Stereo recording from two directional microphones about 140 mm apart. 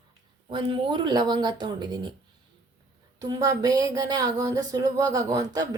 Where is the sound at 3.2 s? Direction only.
25° right (ahead or behind).